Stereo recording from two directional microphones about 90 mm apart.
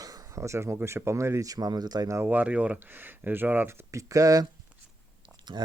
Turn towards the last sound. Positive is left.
turn(degrees=-65)  # may be behind; listen again after turning